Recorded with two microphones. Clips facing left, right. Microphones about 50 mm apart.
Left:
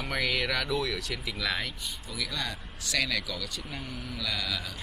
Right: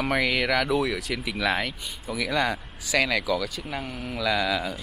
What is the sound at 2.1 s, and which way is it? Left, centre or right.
Speech, right.